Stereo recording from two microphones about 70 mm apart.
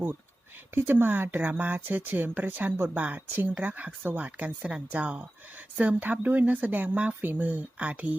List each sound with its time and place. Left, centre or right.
0.7 s speech: right